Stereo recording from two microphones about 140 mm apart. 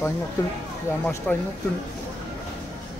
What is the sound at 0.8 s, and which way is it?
Speech, 15° left (ahead or behind).